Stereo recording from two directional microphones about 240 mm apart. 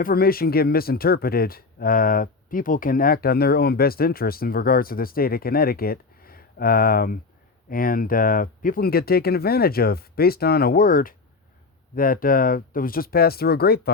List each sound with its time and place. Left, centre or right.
0.0 s speech: left